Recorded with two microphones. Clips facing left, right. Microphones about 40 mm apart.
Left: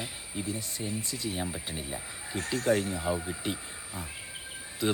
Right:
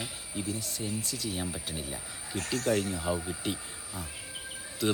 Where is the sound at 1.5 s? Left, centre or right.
Centre.